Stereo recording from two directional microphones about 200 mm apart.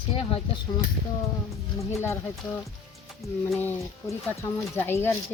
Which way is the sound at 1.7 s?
15° left (ahead or behind).